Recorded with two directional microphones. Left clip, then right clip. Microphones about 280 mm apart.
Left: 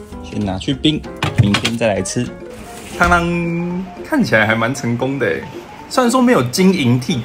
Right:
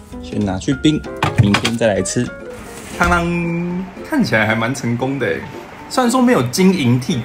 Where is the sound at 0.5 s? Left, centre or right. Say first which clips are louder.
Even; centre.